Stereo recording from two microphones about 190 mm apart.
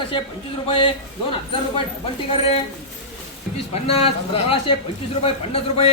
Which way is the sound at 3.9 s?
30° left (ahead or behind).